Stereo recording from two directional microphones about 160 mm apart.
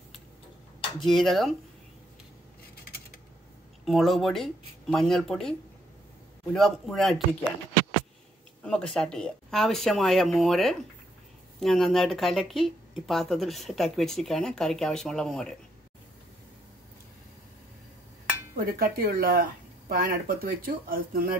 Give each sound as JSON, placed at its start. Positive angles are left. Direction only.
{"t": 0.9, "sound": "speech", "side_deg": 0}
{"t": 3.8, "sound": "speech", "side_deg": 0}
{"t": 8.6, "sound": "speech", "side_deg": 5}
{"t": 18.7, "sound": "speech", "side_deg": -65}